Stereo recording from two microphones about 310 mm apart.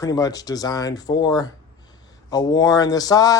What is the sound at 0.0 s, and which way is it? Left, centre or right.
Speech, centre.